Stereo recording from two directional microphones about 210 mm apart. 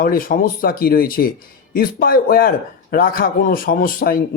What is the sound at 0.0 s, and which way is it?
Speech, 40° left (ahead or behind).